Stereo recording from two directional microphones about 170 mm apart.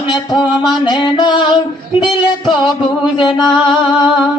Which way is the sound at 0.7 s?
25° left (ahead or behind).